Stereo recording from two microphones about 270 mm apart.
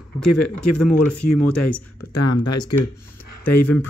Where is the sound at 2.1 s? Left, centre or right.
Left.